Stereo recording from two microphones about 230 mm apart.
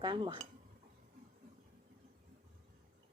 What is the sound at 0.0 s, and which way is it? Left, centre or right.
Speech, right.